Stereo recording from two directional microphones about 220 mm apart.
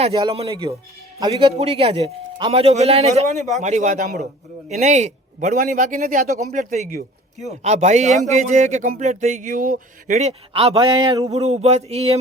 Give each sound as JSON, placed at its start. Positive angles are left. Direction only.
{"t": 0.0, "sound": "a man's voice", "side_deg": -20}
{"t": 11.3, "sound": "a man's voice", "side_deg": -30}